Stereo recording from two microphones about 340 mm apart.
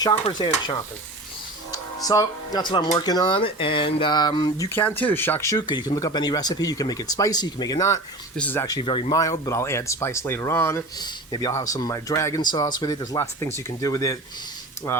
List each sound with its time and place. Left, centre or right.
0.0 s speech: centre